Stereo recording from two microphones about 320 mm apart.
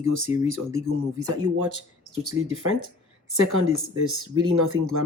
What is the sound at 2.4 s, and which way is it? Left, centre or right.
Speech, right.